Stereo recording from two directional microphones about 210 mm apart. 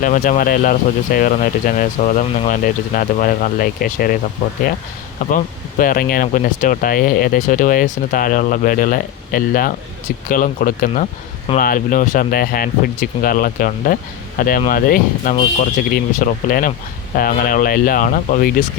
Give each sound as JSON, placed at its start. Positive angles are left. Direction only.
{"t": 0.0, "sound": "speech", "side_deg": 40}
{"t": 5.2, "sound": "speech", "side_deg": 40}